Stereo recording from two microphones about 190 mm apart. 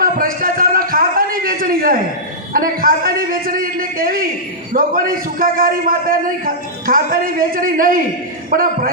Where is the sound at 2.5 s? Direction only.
50° right (ahead or behind).